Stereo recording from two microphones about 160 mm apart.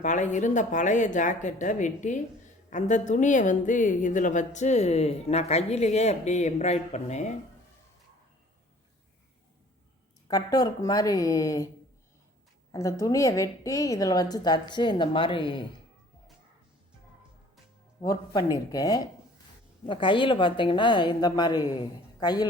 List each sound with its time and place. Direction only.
0.0 s a woman's voice: 50° left (ahead or behind)
10.2 s a woman's voice: 25° left (ahead or behind)
12.7 s a woman's voice: 20° left (ahead or behind)
18.0 s a woman's voice: 20° left (ahead or behind)